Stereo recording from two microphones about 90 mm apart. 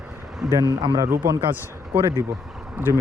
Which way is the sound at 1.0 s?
35° right (ahead or behind).